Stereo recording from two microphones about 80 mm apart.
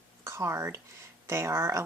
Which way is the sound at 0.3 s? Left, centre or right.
Right.